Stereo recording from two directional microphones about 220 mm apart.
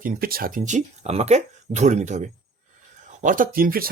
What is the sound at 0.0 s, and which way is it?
Speech, 40° right (ahead or behind).